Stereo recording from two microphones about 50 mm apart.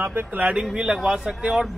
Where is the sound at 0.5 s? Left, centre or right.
Centre.